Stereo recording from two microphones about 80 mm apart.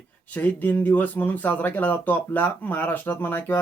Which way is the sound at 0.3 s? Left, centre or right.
Left.